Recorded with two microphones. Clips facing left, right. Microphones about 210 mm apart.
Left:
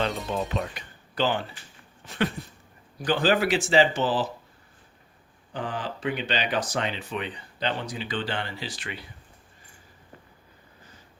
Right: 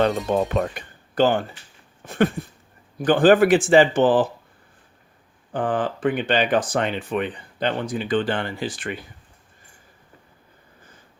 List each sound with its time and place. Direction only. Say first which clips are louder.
0.0 s speech: right 8 dB; 50° right (ahead or behind)
5.5 s speech: right 9 dB; 50° right (ahead or behind)